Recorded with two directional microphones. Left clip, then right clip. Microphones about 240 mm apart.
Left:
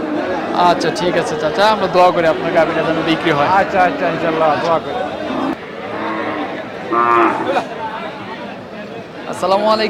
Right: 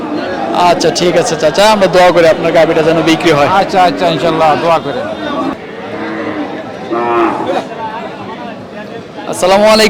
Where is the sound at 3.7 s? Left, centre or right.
Right.